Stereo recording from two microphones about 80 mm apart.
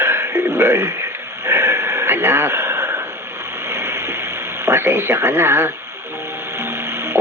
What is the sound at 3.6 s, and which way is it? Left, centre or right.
Radio, right.